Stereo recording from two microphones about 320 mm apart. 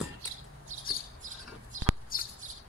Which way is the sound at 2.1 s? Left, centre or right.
Left.